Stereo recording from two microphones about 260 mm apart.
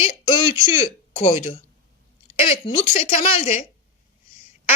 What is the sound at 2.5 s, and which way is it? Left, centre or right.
A woman's voice, left.